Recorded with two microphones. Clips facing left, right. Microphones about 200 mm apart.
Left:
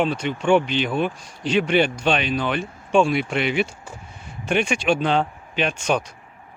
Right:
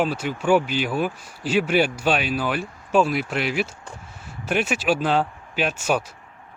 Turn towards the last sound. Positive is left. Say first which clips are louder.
# left 1 dB
turn(degrees=-5)  # may be behind; listen again after turning